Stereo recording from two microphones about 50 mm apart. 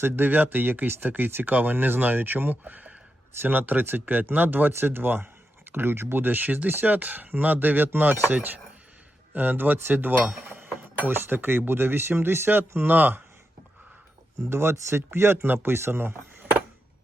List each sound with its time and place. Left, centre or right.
0.0 s speech: right
3.3 s speech: right
4.7 s speech: right
14.3 s speech: right